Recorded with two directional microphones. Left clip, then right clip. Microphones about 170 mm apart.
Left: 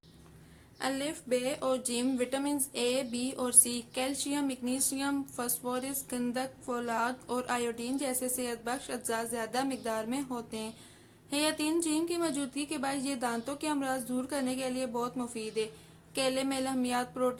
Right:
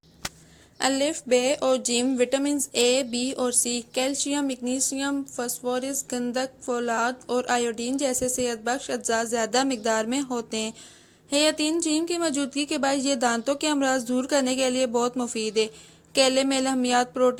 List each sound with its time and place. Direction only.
0.8 s speech: 35° right (ahead or behind)